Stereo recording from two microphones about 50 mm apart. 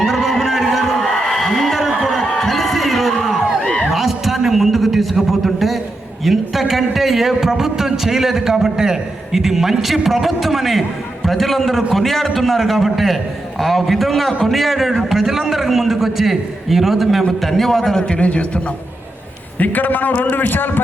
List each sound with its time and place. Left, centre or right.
0.0 s a sound: centre
6.2 s a man's voice: centre
18.2 s a man's voice: left